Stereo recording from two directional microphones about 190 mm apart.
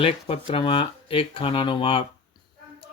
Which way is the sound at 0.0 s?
30° left (ahead or behind).